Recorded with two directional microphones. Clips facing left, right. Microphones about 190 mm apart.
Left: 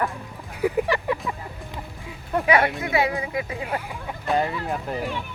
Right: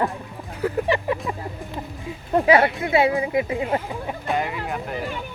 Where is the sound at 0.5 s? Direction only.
10° left (ahead or behind).